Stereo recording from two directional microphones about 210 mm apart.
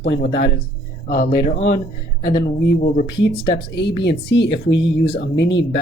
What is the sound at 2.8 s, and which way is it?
Speech, 35° left (ahead or behind).